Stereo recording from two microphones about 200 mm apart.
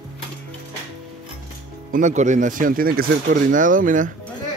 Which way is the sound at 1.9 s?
35° right (ahead or behind).